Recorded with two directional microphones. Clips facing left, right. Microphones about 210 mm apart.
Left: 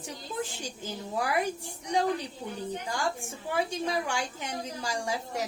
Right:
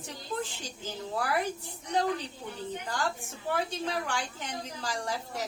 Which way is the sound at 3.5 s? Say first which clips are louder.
Left 2 dB; 10° left (ahead or behind).